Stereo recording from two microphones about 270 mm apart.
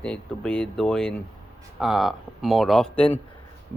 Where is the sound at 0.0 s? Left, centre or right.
Centre.